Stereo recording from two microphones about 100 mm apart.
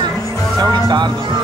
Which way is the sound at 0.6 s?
45° right (ahead or behind).